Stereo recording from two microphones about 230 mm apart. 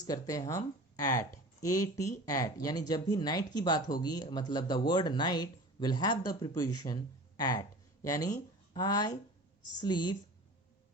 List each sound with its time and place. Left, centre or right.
0.0 s speech: centre